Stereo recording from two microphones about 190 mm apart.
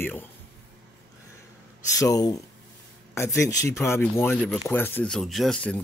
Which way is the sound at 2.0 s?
20° left (ahead or behind).